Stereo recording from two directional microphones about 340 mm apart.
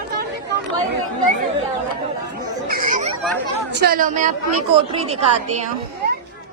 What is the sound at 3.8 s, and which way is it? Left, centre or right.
A woman's voice, right.